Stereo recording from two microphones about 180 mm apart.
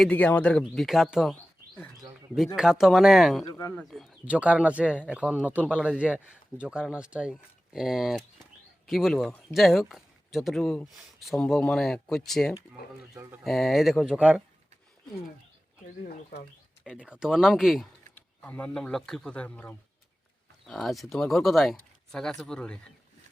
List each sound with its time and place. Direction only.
0.0 s speech: 10° left (ahead or behind)
13.1 s speech: 15° right (ahead or behind)
13.4 s speech: centre (ahead or behind)
15.9 s speech: 55° left (ahead or behind)
17.0 s speech: 5° right (ahead or behind)
18.1 s speech: 10° left (ahead or behind)